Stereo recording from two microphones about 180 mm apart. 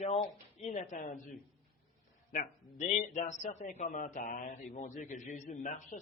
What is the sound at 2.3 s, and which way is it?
A man's voice, 40° left (ahead or behind).